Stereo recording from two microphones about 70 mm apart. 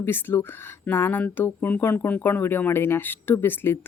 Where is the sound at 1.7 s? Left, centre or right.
Centre.